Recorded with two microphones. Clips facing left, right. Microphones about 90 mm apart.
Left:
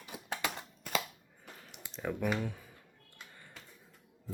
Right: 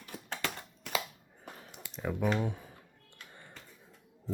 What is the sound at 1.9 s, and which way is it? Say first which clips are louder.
Typing: right 1 dB; 5° right (ahead or behind).